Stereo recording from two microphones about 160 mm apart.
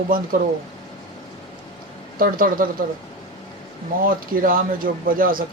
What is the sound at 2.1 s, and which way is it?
Speech, 60° right (ahead or behind).